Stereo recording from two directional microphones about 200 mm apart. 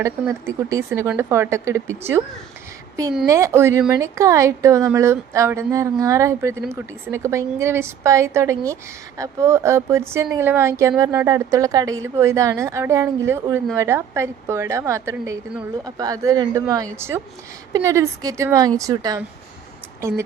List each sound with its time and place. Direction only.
0.0 s a woman's voice: 15° right (ahead or behind)
2.9 s a woman's voice: 15° right (ahead or behind)